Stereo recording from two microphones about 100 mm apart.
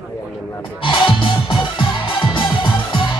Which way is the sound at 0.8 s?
55° left (ahead or behind).